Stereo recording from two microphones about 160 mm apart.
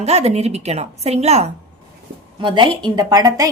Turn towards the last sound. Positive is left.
turn(degrees=-20)  # may be behind; listen again after turning